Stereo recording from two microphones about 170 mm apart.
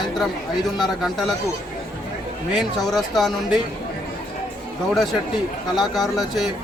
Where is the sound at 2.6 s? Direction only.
Centre (ahead or behind).